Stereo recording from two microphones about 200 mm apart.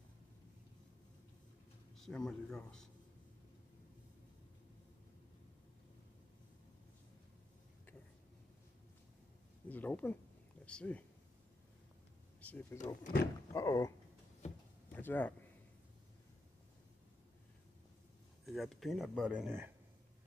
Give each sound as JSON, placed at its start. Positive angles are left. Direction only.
{"t": 2.0, "sound": "speech", "side_deg": 0}
{"t": 9.7, "sound": "speech", "side_deg": 10}
{"t": 12.4, "sound": "power windows", "side_deg": 5}
{"t": 12.7, "sound": "speech", "side_deg": 40}
{"t": 13.2, "sound": "speech", "side_deg": 15}
{"t": 14.9, "sound": "a sound", "side_deg": 10}
{"t": 18.4, "sound": "speech", "side_deg": 0}